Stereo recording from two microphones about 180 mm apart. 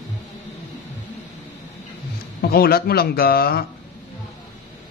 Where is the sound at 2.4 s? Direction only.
60° left (ahead or behind).